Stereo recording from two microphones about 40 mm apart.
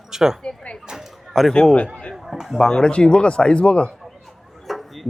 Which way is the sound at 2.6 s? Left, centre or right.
Centre.